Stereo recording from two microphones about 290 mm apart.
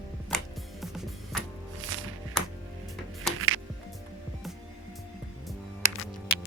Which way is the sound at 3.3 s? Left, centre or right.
Right.